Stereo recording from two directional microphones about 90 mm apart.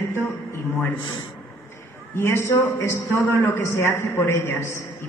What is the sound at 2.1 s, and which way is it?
A man's voice, 30° left (ahead or behind).